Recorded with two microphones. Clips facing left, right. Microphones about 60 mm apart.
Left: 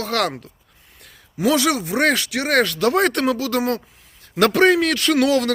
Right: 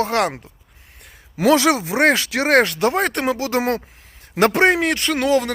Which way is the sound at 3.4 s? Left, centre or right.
Right.